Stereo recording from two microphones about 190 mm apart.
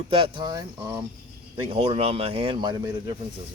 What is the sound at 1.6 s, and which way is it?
Speech, 30° right (ahead or behind).